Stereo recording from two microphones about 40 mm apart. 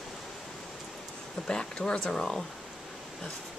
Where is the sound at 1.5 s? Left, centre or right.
Centre.